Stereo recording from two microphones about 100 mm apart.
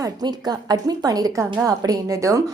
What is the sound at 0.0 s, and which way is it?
A woman's voice, 40° right (ahead or behind).